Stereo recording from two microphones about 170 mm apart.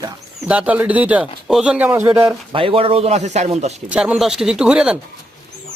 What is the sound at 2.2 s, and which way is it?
Speech, 30° right (ahead or behind).